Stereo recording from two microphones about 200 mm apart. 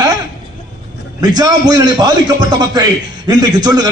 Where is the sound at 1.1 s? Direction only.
20° right (ahead or behind).